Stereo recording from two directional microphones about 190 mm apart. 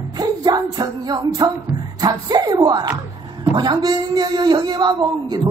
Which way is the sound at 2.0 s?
20° right (ahead or behind).